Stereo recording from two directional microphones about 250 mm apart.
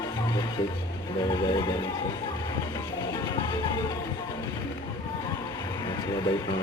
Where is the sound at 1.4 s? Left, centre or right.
Centre.